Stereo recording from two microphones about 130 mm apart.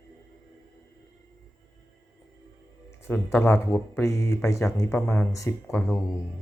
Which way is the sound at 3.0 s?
15° left (ahead or behind).